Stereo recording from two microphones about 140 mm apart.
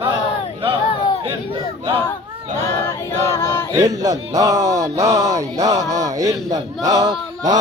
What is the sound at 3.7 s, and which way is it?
Speech, 25° right (ahead or behind).